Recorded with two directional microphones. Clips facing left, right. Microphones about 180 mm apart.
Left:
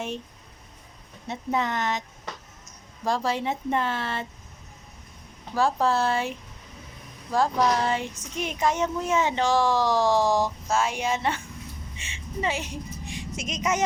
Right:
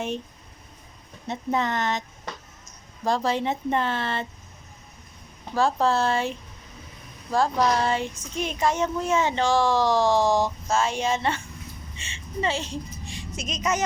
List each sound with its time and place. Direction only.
1.3 s speech: 5° left (ahead or behind)
5.5 s speech: 10° left (ahead or behind)
7.3 s speech: 15° left (ahead or behind)
10.0 s speech: 15° right (ahead or behind)
10.7 s a woman's voice: 10° left (ahead or behind)